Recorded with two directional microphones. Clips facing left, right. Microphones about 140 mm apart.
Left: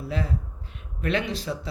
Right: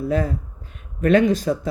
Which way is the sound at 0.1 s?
45° right (ahead or behind).